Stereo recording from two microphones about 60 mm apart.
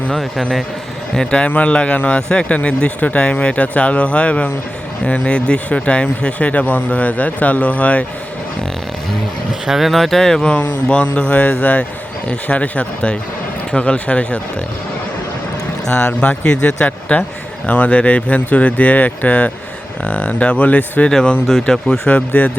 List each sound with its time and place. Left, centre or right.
0.1 s speech: centre
1.1 s a man's voice: centre
9.6 s speech: centre
10.5 s a man's voice: centre
15.9 s a man's voice: centre
21.1 s speech: centre
22.1 s a man's voice: left